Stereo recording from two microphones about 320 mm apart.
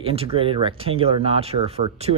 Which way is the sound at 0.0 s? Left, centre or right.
Centre.